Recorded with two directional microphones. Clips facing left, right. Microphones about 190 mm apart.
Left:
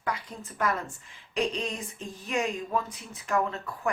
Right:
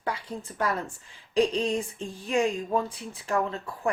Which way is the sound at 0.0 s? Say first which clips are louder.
Right 2 dB; 30° right (ahead or behind).